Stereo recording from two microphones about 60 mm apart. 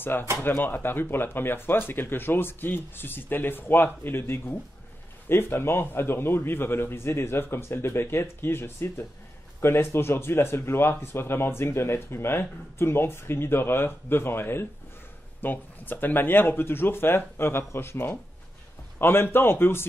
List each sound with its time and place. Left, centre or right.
0.0 s speech: left